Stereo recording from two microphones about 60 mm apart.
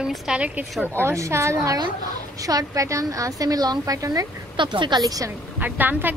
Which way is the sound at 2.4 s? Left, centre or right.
Right.